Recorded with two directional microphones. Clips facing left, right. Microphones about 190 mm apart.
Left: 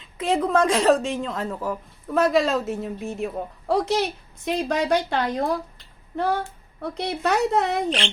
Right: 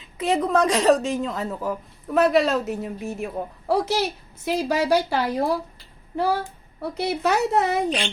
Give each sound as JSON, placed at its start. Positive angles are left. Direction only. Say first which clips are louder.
{"t": 0.0, "sound": "a woman's voice", "louder": "even", "side_deg": 0}
{"t": 6.1, "sound": "a sound", "louder": "right 1 dB", "side_deg": -10}
{"t": 6.8, "sound": "a woman's voice", "louder": "right 2 dB", "side_deg": -5}